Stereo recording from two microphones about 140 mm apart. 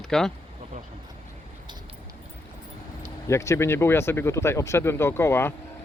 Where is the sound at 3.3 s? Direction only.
20° left (ahead or behind).